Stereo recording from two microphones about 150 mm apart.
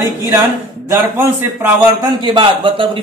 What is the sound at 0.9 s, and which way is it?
Speech, 15° right (ahead or behind).